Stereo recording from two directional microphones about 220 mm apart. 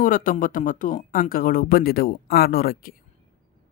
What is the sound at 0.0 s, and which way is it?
Speech, 40° left (ahead or behind).